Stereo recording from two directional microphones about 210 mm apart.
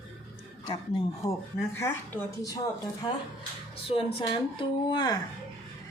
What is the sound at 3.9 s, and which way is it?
Speech, 30° left (ahead or behind).